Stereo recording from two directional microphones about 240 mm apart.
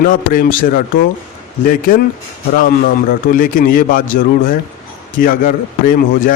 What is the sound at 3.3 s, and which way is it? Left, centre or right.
A man's voice, left.